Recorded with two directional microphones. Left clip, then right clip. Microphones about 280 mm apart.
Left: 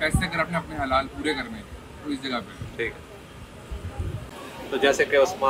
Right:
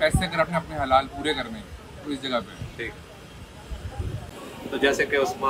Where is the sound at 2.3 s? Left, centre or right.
Centre.